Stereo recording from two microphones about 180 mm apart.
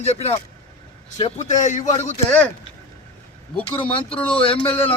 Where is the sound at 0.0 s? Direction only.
35° left (ahead or behind).